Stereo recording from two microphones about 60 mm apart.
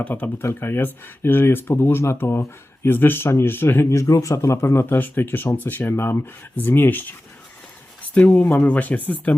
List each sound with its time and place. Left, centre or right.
0.0 s speech: left
0.4 s speech: left
5.9 s speech: left
8.1 s speech: left